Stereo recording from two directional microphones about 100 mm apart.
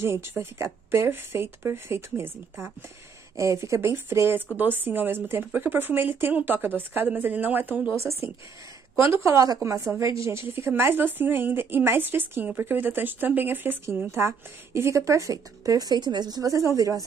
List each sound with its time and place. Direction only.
0.0 s a woman's voice: 25° right (ahead or behind)